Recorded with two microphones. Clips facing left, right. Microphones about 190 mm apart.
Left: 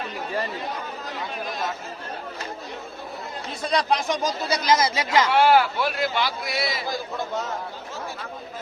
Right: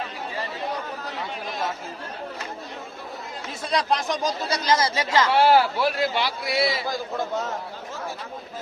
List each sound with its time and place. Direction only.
3.7 s speech: centre (ahead or behind)
5.4 s speech: 35° right (ahead or behind)